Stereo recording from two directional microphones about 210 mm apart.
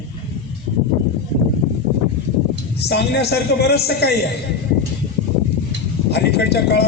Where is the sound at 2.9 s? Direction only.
55° left (ahead or behind).